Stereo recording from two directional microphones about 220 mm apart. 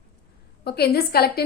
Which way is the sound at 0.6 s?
45° left (ahead or behind).